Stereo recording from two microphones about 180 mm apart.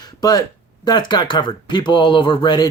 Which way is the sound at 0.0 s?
20° left (ahead or behind).